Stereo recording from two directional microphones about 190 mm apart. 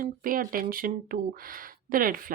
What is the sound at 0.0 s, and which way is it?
Speech, 45° right (ahead or behind).